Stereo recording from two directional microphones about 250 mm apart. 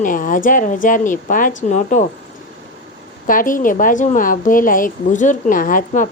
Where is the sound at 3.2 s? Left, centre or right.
Left.